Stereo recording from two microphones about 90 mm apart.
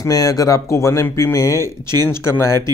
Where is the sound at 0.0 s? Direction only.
40° left (ahead or behind).